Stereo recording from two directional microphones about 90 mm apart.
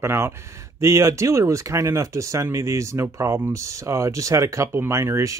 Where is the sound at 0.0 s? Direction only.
30° right (ahead or behind).